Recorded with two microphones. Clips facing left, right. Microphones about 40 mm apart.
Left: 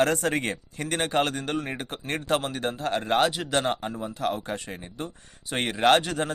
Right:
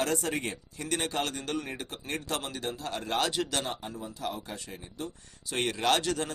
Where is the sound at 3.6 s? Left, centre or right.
Left.